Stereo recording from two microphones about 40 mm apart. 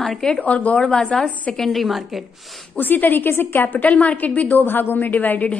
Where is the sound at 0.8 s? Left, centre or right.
Left.